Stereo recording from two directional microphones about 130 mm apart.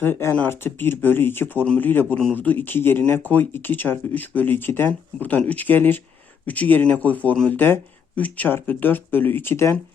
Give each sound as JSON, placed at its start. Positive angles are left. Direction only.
{"t": 0.0, "sound": "speech", "side_deg": 20}